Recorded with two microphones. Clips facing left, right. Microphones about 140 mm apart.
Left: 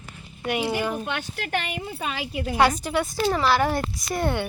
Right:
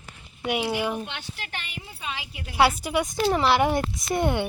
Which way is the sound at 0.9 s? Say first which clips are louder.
Left 4 dB; 45° left (ahead or behind).